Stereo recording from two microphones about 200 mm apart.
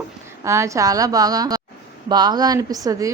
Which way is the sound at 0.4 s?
15° right (ahead or behind).